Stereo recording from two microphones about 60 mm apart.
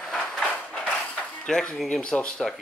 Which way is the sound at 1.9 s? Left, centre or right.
Centre.